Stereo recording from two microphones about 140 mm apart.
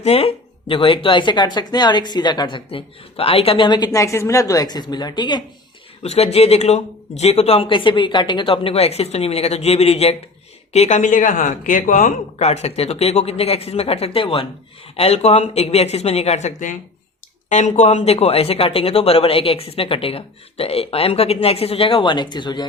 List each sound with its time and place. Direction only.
0.0 s speech: 45° left (ahead or behind)
6.0 s speech: 45° left (ahead or behind)